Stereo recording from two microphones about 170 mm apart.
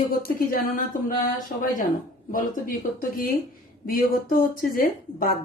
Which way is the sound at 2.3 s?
55° left (ahead or behind).